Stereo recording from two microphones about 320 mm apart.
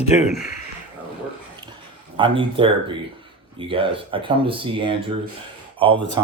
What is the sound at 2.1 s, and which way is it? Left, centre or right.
Speech, centre.